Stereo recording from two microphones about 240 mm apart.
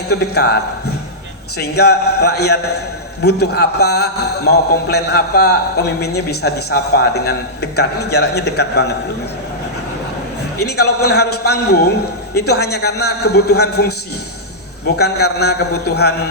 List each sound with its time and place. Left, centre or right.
0.1 s a man's voice: left
1.5 s a man's voice: left
10.6 s a man's voice: left
14.9 s a man's voice: left